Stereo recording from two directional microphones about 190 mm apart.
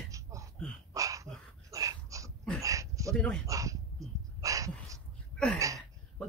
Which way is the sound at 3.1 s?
5° left (ahead or behind).